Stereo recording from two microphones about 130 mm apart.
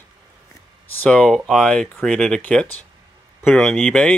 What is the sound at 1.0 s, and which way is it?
Speech, 10° left (ahead or behind).